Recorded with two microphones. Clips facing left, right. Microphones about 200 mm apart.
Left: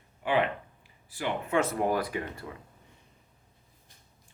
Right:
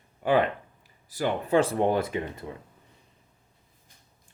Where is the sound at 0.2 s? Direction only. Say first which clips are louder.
Right 4 dB; 40° right (ahead or behind); by 2.5 s 20° right (ahead or behind).